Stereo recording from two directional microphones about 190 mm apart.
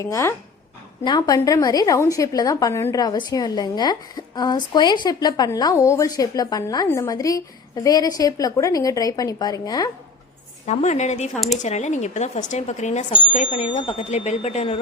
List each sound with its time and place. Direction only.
0.0 s a woman's voice: 15° left (ahead or behind)
10.7 s speech: 35° left (ahead or behind)